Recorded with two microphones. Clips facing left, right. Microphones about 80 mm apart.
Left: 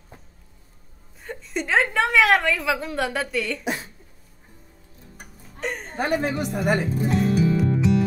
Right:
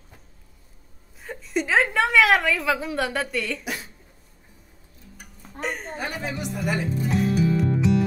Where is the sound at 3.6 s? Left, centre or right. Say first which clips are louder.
Left 4 dB; left.